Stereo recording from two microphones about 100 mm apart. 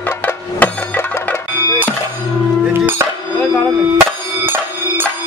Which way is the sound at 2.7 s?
20° right (ahead or behind).